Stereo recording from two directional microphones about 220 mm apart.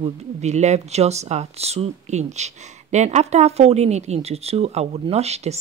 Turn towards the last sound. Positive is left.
turn(degrees=-30)  # may be behind; listen again after turning